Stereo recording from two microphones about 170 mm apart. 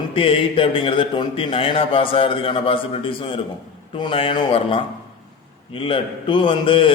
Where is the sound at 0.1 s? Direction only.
30° left (ahead or behind).